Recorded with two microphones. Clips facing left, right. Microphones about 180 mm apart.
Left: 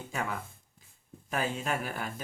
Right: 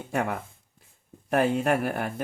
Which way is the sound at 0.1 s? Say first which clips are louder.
Right 8 dB; 65° right (ahead or behind).